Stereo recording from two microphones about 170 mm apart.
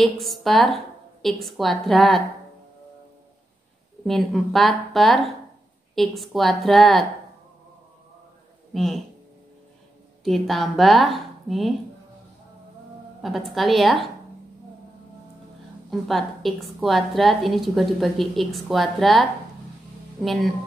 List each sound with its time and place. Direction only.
0.0 s a woman's voice: centre (ahead or behind)
4.0 s a woman's voice: centre (ahead or behind)
8.7 s a woman's voice: centre (ahead or behind)
10.2 s a woman's voice: centre (ahead or behind)
13.2 s a woman's voice: centre (ahead or behind)
15.9 s a woman's voice: centre (ahead or behind)